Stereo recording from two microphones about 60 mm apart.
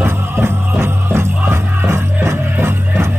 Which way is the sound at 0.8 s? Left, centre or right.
Right.